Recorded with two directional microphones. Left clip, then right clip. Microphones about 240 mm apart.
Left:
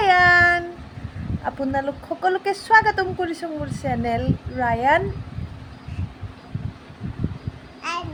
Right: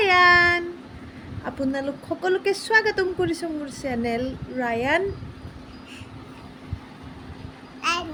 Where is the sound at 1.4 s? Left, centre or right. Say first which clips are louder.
Left 3 dB; left.